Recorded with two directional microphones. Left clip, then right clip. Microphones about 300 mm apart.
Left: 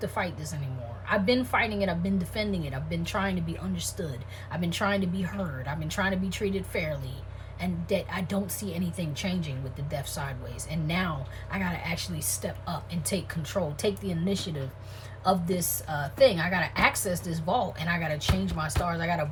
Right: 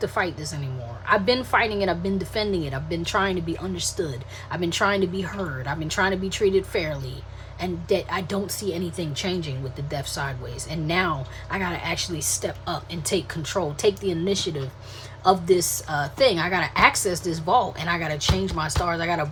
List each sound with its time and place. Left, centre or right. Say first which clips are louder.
0.0 s a woman's voice: right 6 dB; right